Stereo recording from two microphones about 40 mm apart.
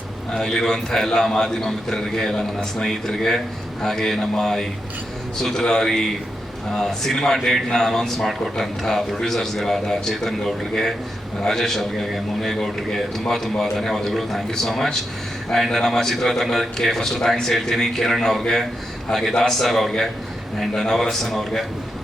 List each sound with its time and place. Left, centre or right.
0.3 s a man's voice: centre